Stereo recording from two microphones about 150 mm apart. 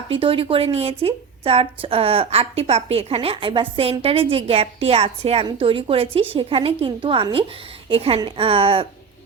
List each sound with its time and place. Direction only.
0.1 s a woman's voice: 35° right (ahead or behind)